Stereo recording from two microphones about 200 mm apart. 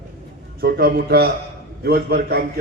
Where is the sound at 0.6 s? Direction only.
50° right (ahead or behind).